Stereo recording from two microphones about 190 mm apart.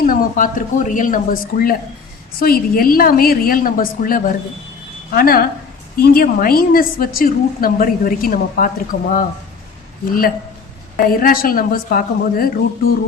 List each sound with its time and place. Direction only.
0.0 s a woman's voice: 45° left (ahead or behind)